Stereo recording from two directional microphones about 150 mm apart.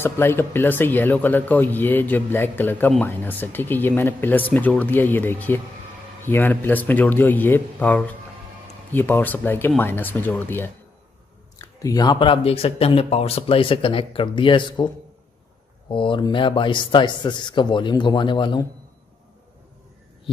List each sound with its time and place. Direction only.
0.0 s speech: 15° left (ahead or behind)
11.5 s speech: 25° left (ahead or behind)
15.9 s speech: 35° left (ahead or behind)